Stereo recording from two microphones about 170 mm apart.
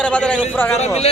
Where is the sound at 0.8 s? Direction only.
35° left (ahead or behind).